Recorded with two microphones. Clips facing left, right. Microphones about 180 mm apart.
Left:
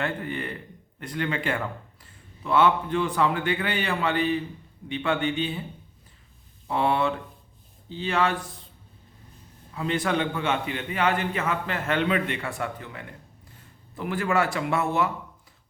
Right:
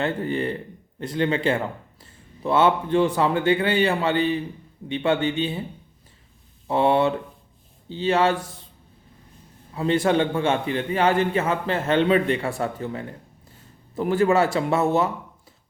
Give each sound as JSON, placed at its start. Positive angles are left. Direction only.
{"t": 0.0, "sound": "speech", "side_deg": -30}
{"t": 6.7, "sound": "speech", "side_deg": -25}
{"t": 9.7, "sound": "a man's voice", "side_deg": -30}